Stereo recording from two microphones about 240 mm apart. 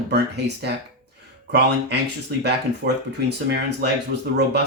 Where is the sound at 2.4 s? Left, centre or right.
Right.